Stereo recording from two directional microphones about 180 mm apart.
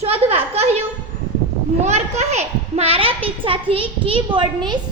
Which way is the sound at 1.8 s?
40° right (ahead or behind).